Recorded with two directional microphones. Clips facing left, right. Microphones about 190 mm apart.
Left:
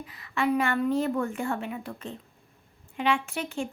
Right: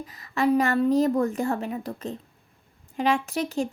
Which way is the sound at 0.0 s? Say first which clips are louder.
Right 4 dB; 40° right (ahead or behind).